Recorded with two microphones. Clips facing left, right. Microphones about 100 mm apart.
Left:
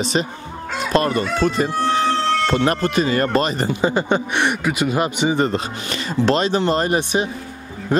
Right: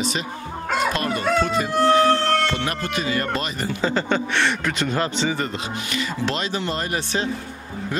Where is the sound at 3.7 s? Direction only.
15° left (ahead or behind).